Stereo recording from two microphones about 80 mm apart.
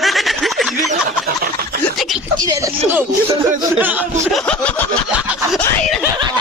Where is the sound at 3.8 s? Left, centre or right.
Right.